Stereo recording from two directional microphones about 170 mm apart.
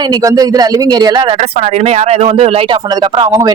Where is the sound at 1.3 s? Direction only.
40° right (ahead or behind).